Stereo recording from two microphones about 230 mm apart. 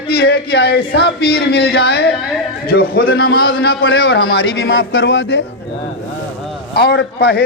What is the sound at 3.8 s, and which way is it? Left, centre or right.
Speech, left.